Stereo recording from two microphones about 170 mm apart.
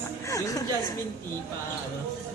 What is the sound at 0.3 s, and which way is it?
Speech, 20° left (ahead or behind).